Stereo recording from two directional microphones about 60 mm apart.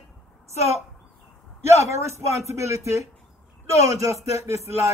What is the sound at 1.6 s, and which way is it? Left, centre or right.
A man's voice, right.